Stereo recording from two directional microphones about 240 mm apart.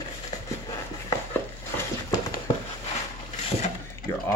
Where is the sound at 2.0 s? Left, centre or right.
Centre.